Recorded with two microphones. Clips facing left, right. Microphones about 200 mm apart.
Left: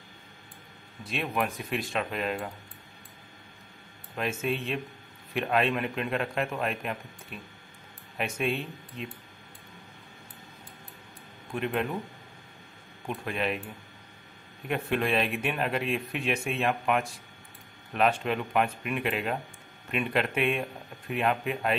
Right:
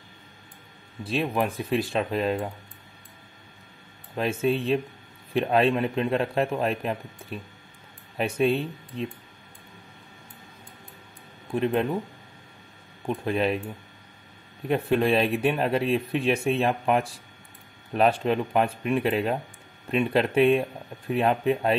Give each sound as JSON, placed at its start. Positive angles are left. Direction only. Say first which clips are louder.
{"t": 1.0, "sound": "speech", "louder": "right 5 dB", "side_deg": -30}
{"t": 4.1, "sound": "speech", "louder": "right 6 dB", "side_deg": -35}
{"t": 11.5, "sound": "speech", "louder": "right 6 dB", "side_deg": -35}
{"t": 13.1, "sound": "speech", "louder": "right 6 dB", "side_deg": -35}
{"t": 14.7, "sound": "speech", "louder": "right 6 dB", "side_deg": -35}